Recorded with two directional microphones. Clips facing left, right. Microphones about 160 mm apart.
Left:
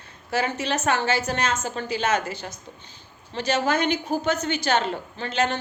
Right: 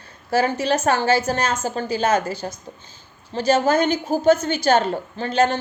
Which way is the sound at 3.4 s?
40° right (ahead or behind).